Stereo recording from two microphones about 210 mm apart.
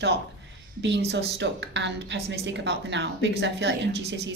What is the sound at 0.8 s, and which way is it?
Speech, 55° right (ahead or behind).